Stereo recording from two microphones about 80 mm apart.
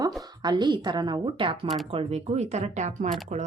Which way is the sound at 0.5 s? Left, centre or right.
Right.